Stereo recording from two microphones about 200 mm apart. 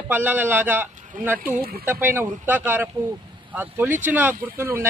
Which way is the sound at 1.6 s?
50° right (ahead or behind).